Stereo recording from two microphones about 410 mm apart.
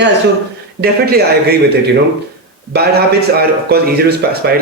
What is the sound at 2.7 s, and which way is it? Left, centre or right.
A man's voice, right.